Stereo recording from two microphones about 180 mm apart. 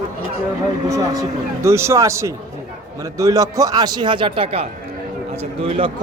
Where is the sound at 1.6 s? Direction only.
15° right (ahead or behind); by 4.6 s 30° right (ahead or behind).